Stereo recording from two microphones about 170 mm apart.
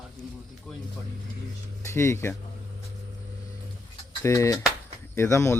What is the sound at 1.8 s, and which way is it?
Speech, 15° left (ahead or behind).